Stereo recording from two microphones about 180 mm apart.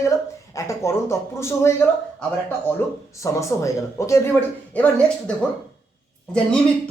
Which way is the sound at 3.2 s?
15° left (ahead or behind).